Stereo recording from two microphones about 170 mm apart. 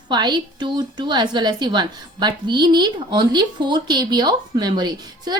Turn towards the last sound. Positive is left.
turn(degrees=-25)  # may be behind; listen again after turning